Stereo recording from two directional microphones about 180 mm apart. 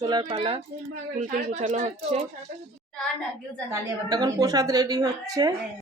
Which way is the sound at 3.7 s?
20° right (ahead or behind).